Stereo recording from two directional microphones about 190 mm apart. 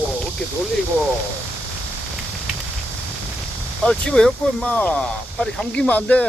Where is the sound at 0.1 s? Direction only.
Centre (ahead or behind).